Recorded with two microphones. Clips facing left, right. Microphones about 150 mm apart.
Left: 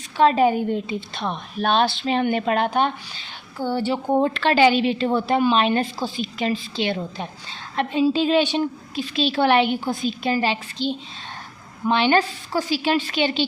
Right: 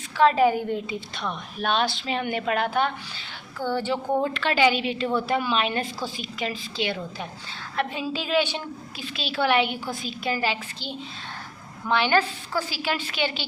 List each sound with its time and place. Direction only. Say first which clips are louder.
0.2 s a woman's voice: left 2 dB; 20° left (ahead or behind)
4.1 s a woman's voice: left 6 dB; 30° left (ahead or behind)